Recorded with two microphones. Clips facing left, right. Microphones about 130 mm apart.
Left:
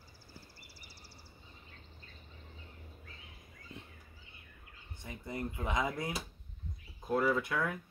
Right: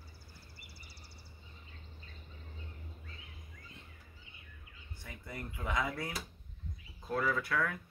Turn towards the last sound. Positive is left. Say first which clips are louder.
# left 2 dB
turn(degrees=20)  # may be behind; listen again after turning